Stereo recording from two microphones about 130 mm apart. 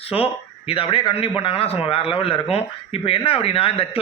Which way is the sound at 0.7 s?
45° left (ahead or behind).